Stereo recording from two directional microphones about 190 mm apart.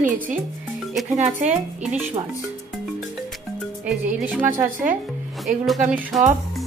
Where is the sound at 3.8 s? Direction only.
5° right (ahead or behind).